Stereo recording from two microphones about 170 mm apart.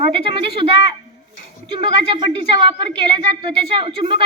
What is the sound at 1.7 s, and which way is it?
A woman's voice, 30° right (ahead or behind).